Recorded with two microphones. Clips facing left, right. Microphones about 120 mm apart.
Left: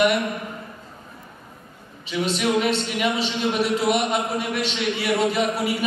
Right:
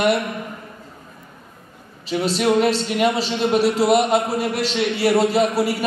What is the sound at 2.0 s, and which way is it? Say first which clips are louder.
Speech: right 4 dB; 35° right (ahead or behind).